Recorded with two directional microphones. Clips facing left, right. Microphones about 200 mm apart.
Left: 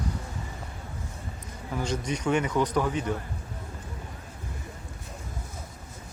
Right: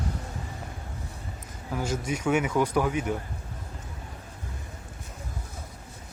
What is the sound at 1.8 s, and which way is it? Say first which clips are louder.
A man's voice: even; 5° right (ahead or behind).